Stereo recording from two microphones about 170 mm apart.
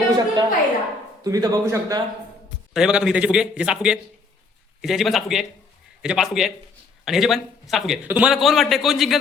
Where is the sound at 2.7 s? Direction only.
5° right (ahead or behind).